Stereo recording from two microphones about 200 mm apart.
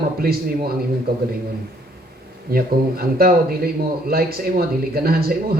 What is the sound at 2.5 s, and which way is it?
Speech, 50° right (ahead or behind).